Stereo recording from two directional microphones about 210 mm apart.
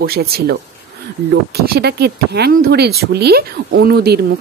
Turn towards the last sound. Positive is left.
turn(degrees=-50)  # may be behind; listen again after turning